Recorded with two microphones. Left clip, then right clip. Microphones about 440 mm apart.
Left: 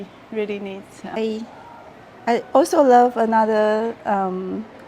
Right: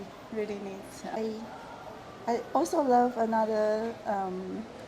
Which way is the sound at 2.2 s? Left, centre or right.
Left.